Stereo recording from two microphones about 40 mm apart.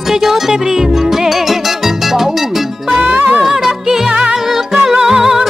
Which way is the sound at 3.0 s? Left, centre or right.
Right.